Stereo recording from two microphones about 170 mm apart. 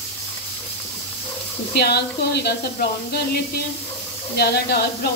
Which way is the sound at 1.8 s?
70° left (ahead or behind).